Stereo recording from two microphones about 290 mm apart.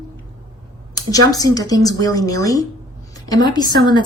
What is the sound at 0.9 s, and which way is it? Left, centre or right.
A woman's voice, centre.